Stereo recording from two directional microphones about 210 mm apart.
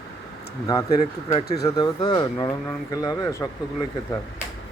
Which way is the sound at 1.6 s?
20° left (ahead or behind).